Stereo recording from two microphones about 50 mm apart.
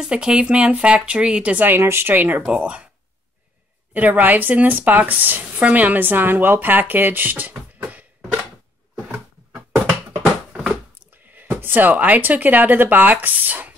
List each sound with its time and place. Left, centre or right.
0.0 s speech: centre
1.8 s speech: right
2.1 s a woman's voice: right
2.5 s speech: right
3.9 s a woman's voice: right
7.8 s a sound: right
10.5 s a sound: centre
11.6 s a woman's voice: right